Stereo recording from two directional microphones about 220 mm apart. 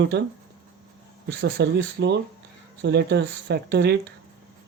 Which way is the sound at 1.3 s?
50° right (ahead or behind).